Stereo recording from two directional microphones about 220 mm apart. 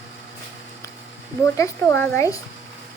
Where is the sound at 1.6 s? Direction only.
10° left (ahead or behind).